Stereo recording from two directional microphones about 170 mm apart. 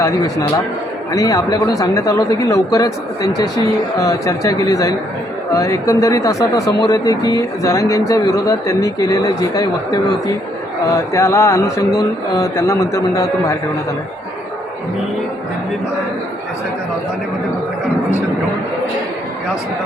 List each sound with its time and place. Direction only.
0.0 s speech: 20° left (ahead or behind)